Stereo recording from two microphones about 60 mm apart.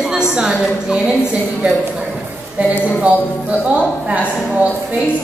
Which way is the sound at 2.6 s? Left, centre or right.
Right.